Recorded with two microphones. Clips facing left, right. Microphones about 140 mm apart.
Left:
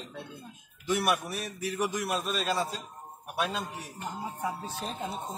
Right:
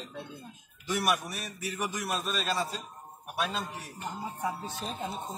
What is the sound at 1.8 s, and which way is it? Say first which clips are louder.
Speech: left 2 dB; 10° left (ahead or behind).